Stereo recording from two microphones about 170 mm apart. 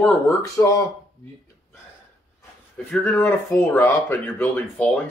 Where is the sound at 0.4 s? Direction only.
20° left (ahead or behind).